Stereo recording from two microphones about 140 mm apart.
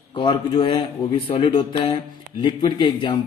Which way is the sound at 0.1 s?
35° left (ahead or behind).